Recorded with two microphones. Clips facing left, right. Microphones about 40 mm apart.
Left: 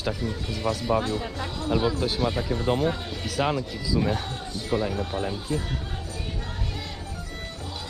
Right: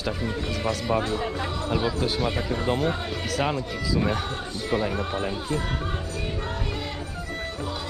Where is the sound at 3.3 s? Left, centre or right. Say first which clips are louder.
Left 1 dB; centre.